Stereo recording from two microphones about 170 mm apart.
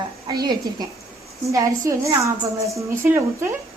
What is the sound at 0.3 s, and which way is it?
A woman's voice, 25° right (ahead or behind).